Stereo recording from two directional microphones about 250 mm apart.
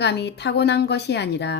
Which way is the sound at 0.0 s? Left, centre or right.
Left.